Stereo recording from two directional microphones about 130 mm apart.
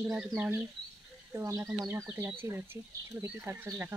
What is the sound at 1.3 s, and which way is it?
Speech, 25° right (ahead or behind).